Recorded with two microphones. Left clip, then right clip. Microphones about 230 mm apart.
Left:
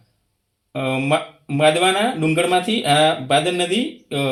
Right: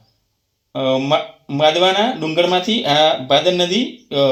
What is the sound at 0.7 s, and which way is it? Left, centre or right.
Speech, centre.